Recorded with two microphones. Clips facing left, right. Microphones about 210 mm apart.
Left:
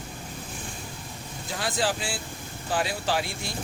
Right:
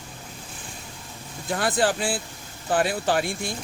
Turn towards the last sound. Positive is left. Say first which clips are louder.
# right 4 dB
turn(degrees=-50)  # may be behind; listen again after turning